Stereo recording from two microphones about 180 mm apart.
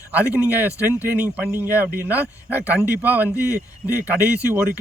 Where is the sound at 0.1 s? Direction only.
10° right (ahead or behind).